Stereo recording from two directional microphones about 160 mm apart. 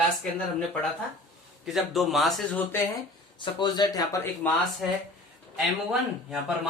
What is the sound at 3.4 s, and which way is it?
Speech, 30° left (ahead or behind).